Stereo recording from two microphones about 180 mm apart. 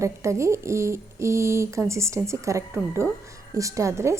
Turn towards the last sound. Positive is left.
turn(degrees=-15)  # may be behind; listen again after turning